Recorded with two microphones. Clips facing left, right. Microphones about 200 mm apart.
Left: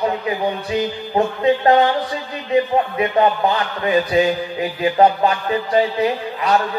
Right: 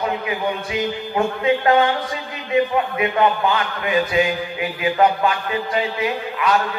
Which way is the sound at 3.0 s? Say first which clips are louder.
Left 1 dB; 35° left (ahead or behind).